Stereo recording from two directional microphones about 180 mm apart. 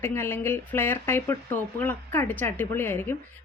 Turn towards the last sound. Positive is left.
turn(degrees=10)  # may be behind; listen again after turning